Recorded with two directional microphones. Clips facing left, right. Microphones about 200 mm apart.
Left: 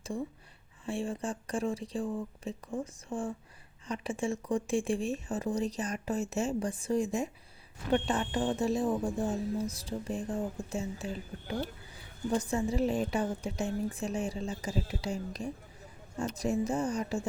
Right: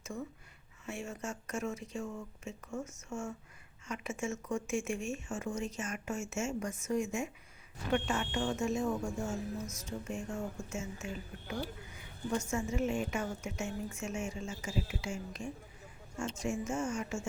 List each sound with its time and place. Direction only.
0.9 s a woman's voice: 30° left (ahead or behind)